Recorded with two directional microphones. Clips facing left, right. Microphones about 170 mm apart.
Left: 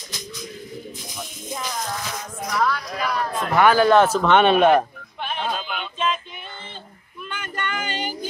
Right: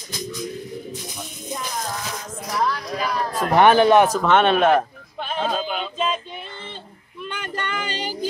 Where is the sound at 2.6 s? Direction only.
30° right (ahead or behind).